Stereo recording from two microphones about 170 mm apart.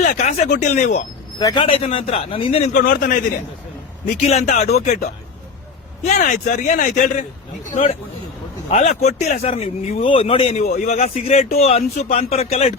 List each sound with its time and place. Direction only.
0.0 s speech: 45° left (ahead or behind)
1.4 s speech: 25° left (ahead or behind)
2.8 s a man's voice: 60° left (ahead or behind)
4.1 s speech: 40° left (ahead or behind)
6.1 s speech: 45° left (ahead or behind)
8.7 s speech: 40° left (ahead or behind)